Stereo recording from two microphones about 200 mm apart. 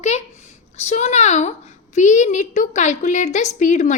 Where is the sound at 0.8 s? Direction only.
35° left (ahead or behind).